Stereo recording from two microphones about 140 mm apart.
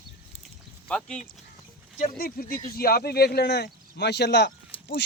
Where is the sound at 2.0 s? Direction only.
90° left.